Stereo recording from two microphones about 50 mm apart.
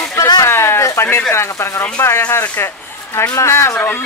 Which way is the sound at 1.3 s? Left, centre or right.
Left.